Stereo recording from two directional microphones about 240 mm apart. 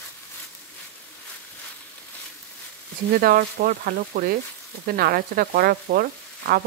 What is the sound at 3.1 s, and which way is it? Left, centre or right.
Frying, right.